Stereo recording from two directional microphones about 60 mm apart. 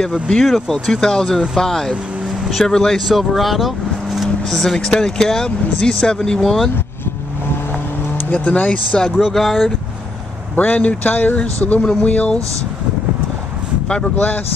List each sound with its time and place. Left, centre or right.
0.0 s speech: centre
8.3 s speech: left
9.3 s speech: centre
10.5 s speech: left
13.8 s speech: centre